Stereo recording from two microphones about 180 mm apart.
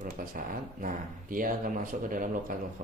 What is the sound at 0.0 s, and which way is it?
Speech, 50° right (ahead or behind).